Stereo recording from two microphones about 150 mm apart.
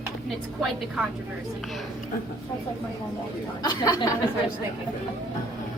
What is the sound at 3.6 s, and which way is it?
Speech, 25° left (ahead or behind).